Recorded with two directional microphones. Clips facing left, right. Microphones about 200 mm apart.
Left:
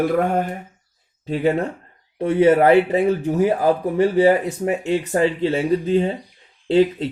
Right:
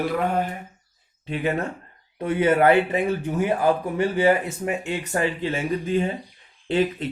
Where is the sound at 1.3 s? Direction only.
35° left (ahead or behind).